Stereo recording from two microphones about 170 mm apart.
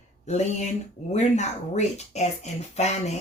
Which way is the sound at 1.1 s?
40° left (ahead or behind).